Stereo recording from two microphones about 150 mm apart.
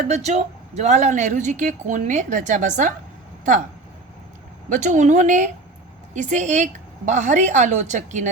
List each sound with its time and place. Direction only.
0.1 s speech: 50° right (ahead or behind)
4.7 s a woman's voice: 55° right (ahead or behind)